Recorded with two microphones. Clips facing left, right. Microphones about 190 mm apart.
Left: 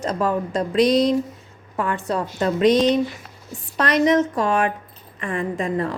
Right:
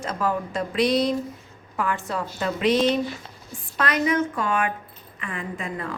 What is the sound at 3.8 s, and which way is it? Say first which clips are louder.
A woman's voice: left 5 dB; 40° left (ahead or behind).